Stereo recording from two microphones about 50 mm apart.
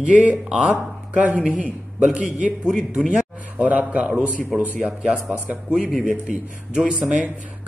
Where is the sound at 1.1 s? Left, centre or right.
Right.